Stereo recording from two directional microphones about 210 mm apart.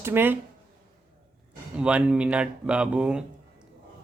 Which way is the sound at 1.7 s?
5° right (ahead or behind).